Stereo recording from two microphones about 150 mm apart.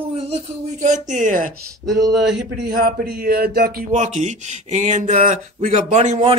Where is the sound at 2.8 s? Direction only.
90° right.